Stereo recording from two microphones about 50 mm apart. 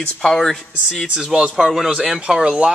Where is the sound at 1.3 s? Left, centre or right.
Centre.